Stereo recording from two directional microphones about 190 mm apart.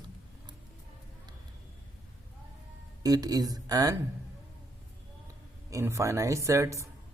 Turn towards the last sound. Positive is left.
turn(degrees=-15)  # may be behind; listen again after turning